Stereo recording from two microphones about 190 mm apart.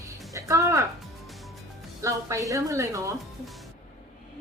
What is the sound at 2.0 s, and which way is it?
A woman's voice, 15° right (ahead or behind).